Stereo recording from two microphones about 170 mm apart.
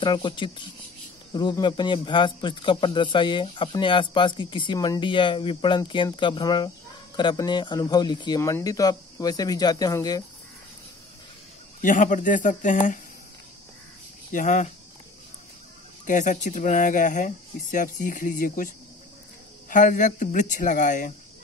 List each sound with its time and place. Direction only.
0.0 s a man's voice: 25° left (ahead or behind)
11.8 s speech: 50° left (ahead or behind)
14.3 s speech: 45° left (ahead or behind)
16.1 s speech: 45° left (ahead or behind)
19.7 s speech: 50° left (ahead or behind)